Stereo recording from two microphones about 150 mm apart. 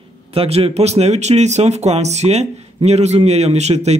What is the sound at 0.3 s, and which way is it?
Speech, 40° right (ahead or behind).